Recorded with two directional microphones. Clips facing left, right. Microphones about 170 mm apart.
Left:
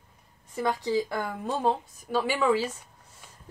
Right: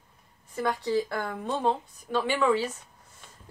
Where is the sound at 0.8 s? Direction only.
15° left (ahead or behind); by 2.7 s centre (ahead or behind).